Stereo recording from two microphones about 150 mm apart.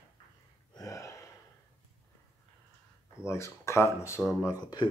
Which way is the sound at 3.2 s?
20° left (ahead or behind).